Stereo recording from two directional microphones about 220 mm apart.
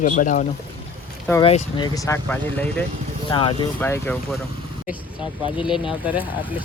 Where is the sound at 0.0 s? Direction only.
35° left (ahead or behind).